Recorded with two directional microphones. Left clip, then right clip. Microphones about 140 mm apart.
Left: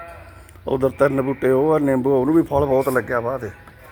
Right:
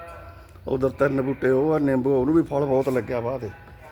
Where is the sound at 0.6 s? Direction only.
10° left (ahead or behind).